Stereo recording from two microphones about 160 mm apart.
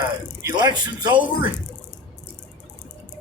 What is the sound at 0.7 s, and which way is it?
Speech, 25° right (ahead or behind).